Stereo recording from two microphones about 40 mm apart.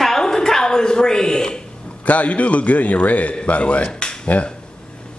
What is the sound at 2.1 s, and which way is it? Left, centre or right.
A man's voice, left.